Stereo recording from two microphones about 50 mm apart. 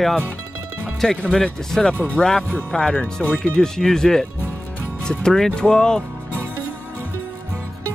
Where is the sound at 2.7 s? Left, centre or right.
Centre.